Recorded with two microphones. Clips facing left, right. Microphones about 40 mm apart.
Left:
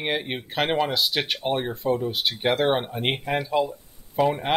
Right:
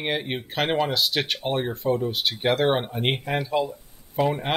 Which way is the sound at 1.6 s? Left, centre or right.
Centre.